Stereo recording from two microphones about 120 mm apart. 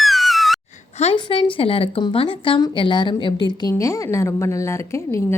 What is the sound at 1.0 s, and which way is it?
A woman's voice, 50° left (ahead or behind).